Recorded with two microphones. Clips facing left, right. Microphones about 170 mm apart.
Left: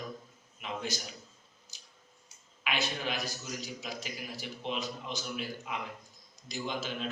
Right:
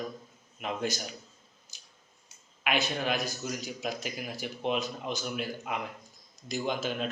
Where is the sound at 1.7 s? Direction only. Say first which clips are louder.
Even; 50° right (ahead or behind).